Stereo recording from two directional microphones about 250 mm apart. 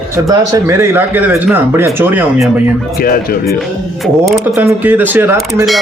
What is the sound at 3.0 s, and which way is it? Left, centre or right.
Speech, left.